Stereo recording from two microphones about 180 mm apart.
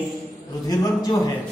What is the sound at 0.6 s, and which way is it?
Speech, 20° left (ahead or behind).